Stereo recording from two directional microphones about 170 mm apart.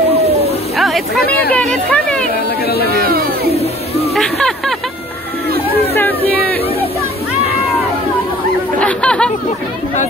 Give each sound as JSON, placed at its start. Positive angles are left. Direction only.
{"t": 0.7, "sound": "a sound", "side_deg": 0}
{"t": 1.5, "sound": "speech", "side_deg": 5}
{"t": 3.0, "sound": "a sound", "side_deg": -65}
{"t": 3.5, "sound": "music", "side_deg": 35}
{"t": 4.1, "sound": "music", "side_deg": 5}
{"t": 8.7, "sound": "chatter", "side_deg": 5}